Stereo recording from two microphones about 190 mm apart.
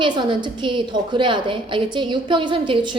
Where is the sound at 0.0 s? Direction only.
25° right (ahead or behind).